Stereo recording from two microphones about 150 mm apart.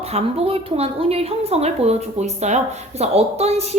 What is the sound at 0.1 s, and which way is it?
A woman's voice, 40° right (ahead or behind).